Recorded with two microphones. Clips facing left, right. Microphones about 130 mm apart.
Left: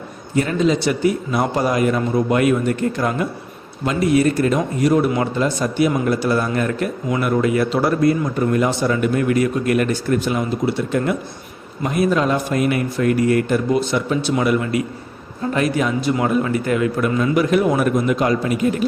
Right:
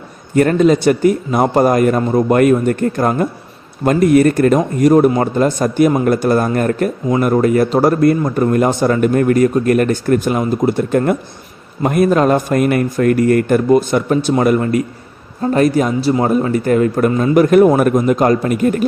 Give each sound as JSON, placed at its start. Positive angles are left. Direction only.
{"t": 0.3, "sound": "a man's voice", "side_deg": -55}